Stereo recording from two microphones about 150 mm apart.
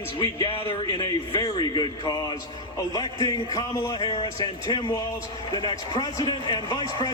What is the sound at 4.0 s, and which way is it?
Speech, 35° left (ahead or behind).